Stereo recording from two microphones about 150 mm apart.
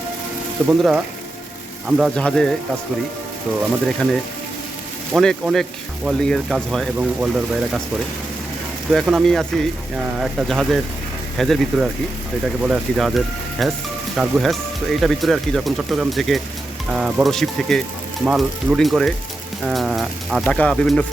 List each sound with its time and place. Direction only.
0.8 s speech: 5° right (ahead or behind)
3.6 s speech: 5° right (ahead or behind)
5.2 s speech: 5° left (ahead or behind)
8.9 s speech: centre (ahead or behind)